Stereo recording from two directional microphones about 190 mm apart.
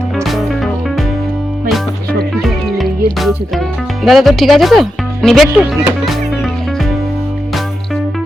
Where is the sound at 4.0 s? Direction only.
Centre (ahead or behind).